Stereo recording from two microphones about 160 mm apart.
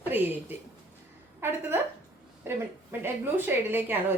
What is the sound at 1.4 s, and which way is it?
Speech, 15° right (ahead or behind).